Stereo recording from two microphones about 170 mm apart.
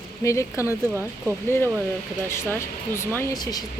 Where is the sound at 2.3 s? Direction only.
15° left (ahead or behind).